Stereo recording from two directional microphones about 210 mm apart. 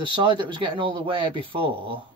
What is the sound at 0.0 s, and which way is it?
Speech, 25° right (ahead or behind).